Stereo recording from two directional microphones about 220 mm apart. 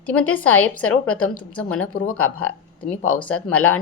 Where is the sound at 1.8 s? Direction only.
75° left (ahead or behind).